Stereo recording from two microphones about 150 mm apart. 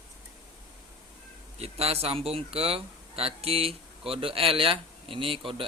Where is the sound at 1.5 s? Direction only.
45° right (ahead or behind).